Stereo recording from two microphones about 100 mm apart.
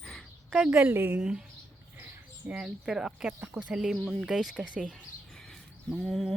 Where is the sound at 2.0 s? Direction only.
15° right (ahead or behind).